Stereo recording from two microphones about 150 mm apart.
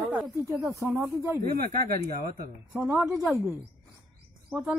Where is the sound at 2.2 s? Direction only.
90° right.